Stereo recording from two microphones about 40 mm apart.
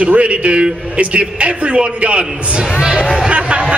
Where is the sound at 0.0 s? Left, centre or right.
Right.